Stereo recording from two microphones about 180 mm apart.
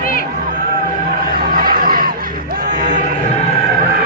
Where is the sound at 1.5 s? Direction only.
55° right (ahead or behind).